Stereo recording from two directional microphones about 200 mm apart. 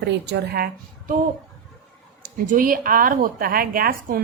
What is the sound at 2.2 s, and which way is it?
Speech, 45° right (ahead or behind).